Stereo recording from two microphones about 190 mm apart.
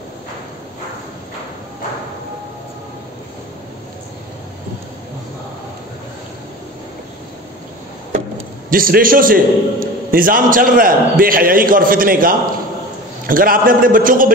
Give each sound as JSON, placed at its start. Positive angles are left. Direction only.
{"t": 8.6, "sound": "a man's voice", "side_deg": -50}